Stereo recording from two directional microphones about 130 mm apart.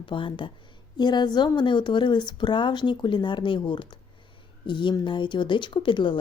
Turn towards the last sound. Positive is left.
turn(degrees=40)  # may be behind; listen again after turning